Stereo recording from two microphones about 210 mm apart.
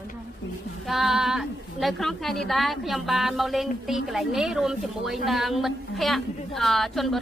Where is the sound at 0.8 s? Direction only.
Centre (ahead or behind).